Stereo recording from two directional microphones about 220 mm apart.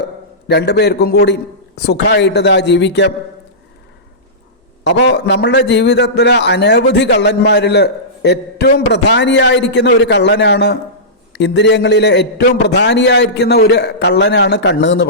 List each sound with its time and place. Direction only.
0.4 s a man's voice: 50° left (ahead or behind)
4.8 s a man's voice: 55° left (ahead or behind)